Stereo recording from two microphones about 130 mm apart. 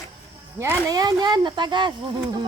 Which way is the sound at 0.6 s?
25° right (ahead or behind).